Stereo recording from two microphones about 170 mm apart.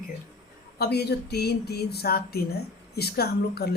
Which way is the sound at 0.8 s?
70° left (ahead or behind).